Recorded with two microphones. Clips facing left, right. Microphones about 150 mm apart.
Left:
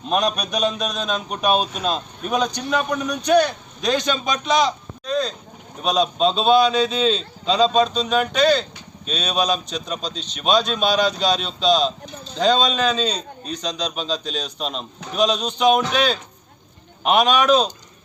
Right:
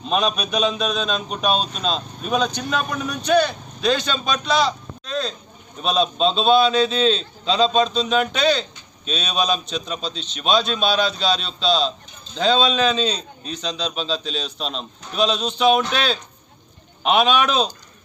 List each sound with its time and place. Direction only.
0.0 s a man's voice: 10° left (ahead or behind)
0.3 s a man's voice: 5° right (ahead or behind)
0.8 s a man's voice: 10° left (ahead or behind)
3.2 s a man's voice: 10° left (ahead or behind)